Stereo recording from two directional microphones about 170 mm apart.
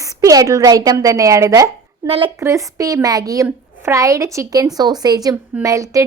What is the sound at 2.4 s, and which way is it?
Speech, 20° right (ahead or behind).